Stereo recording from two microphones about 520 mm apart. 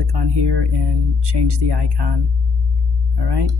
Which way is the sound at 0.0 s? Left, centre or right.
Right.